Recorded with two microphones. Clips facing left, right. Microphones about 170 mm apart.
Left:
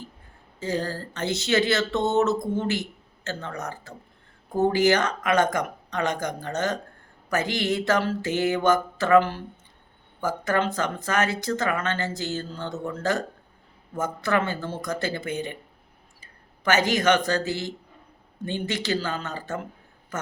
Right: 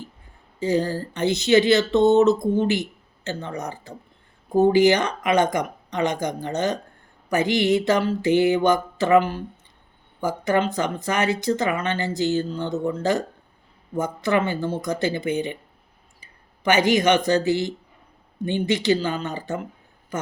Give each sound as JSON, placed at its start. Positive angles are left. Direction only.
{"t": 0.6, "sound": "speech", "side_deg": -15}